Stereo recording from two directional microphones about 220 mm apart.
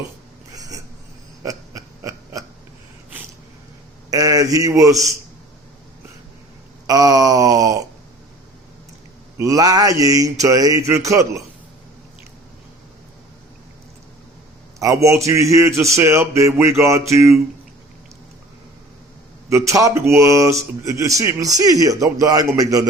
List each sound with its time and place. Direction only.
0.5 s a sound: 15° right (ahead or behind)
4.1 s speech: 15° right (ahead or behind)
6.8 s groan: 15° right (ahead or behind)
9.4 s speech: 15° right (ahead or behind)
14.8 s speech: 15° right (ahead or behind)
19.5 s speech: 15° right (ahead or behind)